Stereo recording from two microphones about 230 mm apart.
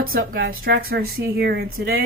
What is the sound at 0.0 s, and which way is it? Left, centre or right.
Speech, right.